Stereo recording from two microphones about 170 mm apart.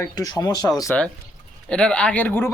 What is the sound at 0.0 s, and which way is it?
Speech, 20° left (ahead or behind).